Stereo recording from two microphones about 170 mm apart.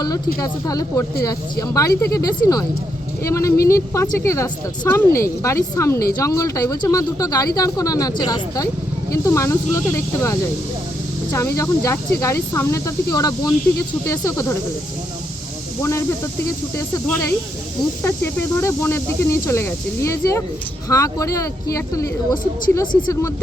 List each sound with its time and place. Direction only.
0.3 s speech: 20° left (ahead or behind)
15.8 s speech: 15° left (ahead or behind)